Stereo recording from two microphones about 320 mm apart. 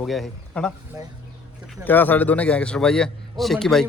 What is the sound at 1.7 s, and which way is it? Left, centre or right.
A man's voice, centre.